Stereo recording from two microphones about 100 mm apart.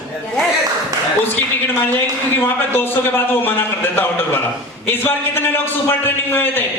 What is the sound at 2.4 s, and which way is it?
Speech, 20° left (ahead or behind).